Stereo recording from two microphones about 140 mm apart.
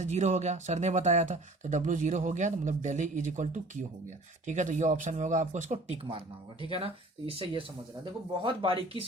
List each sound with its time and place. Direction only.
0.0 s speech: 55° right (ahead or behind)
6.7 s speech: 40° right (ahead or behind)